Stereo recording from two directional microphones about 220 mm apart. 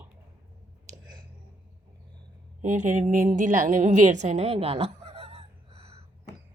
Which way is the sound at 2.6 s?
35° right (ahead or behind).